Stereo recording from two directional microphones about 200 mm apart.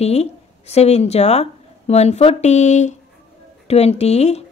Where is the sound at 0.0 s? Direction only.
30° left (ahead or behind).